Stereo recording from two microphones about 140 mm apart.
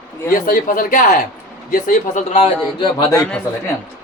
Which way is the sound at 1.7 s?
75° left (ahead or behind).